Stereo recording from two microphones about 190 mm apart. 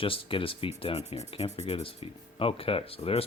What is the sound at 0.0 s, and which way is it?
Speech, 30° left (ahead or behind).